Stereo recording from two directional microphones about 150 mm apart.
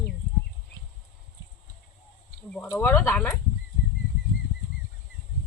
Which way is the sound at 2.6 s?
20° left (ahead or behind).